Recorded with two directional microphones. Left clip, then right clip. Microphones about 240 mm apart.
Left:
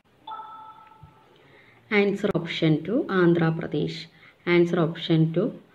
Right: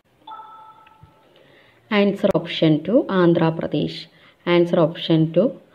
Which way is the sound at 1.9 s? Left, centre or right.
Centre.